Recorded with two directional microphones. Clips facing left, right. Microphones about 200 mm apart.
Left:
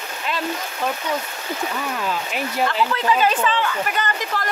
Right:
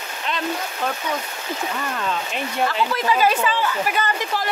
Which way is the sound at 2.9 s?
10° right (ahead or behind).